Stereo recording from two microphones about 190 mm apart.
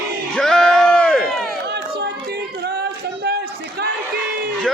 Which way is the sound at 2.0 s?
60° right (ahead or behind).